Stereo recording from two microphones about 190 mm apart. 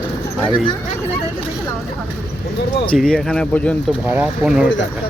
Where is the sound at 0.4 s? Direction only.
25° left (ahead or behind).